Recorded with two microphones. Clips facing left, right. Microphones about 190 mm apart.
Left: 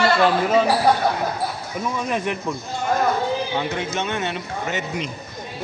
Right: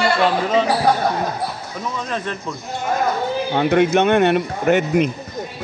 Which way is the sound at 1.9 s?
15° left (ahead or behind).